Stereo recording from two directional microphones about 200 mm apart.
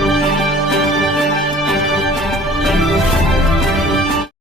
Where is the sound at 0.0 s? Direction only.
Centre (ahead or behind).